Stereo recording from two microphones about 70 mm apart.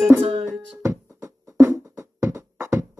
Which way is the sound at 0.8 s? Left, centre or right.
Right.